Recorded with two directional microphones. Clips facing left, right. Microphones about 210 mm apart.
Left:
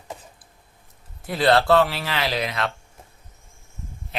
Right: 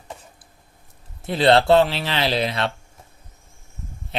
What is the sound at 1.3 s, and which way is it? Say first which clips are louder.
Speech: right 3 dB; 25° right (ahead or behind).